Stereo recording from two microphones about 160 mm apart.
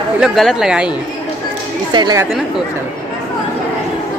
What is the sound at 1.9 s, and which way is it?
Speech, 25° right (ahead or behind).